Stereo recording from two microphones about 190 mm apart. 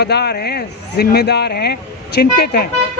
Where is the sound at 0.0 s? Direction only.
60° left (ahead or behind).